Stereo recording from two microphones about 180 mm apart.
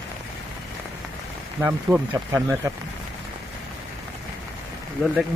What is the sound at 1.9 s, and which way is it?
Speech, 20° right (ahead or behind).